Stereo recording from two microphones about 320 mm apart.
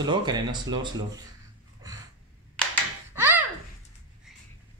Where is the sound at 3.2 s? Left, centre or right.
Centre.